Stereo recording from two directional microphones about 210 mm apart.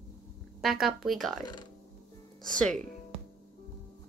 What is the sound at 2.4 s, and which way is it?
Speech, 5° left (ahead or behind).